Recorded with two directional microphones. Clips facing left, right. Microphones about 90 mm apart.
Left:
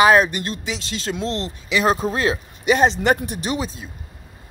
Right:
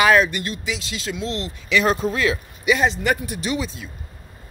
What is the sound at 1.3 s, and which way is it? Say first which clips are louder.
Speech: right 1 dB; 25° left (ahead or behind).